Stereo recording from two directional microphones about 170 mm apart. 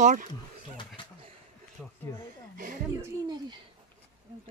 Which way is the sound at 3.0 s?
25° right (ahead or behind).